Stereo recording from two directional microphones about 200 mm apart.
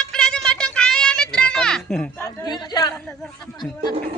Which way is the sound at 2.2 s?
15° left (ahead or behind).